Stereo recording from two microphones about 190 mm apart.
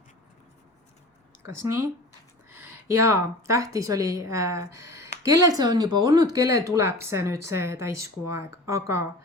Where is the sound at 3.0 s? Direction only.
15° right (ahead or behind).